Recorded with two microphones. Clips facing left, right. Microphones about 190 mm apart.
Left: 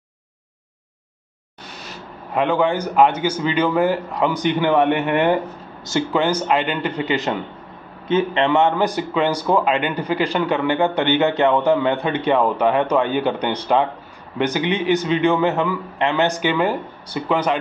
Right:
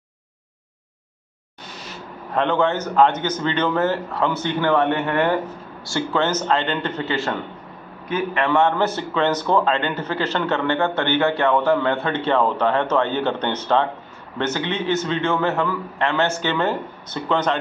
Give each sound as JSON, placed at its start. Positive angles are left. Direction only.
{"t": 2.3, "sound": "a man's voice", "side_deg": 10}